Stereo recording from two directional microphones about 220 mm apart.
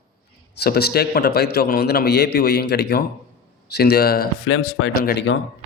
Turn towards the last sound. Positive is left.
turn(degrees=50)  # may be behind; listen again after turning